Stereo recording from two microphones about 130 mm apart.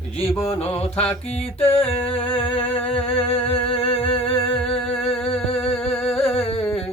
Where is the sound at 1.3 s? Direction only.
50° left (ahead or behind).